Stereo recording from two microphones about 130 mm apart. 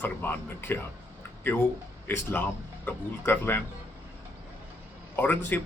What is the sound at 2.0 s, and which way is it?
Speech, 15° left (ahead or behind).